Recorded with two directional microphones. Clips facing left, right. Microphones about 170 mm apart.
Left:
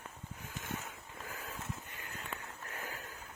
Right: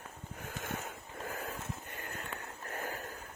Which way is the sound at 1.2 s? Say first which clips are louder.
Right 4 dB; 50° right (ahead or behind).